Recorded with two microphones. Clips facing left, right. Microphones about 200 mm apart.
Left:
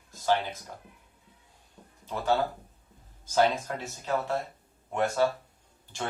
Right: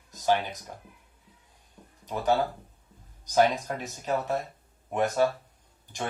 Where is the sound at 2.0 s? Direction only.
15° right (ahead or behind).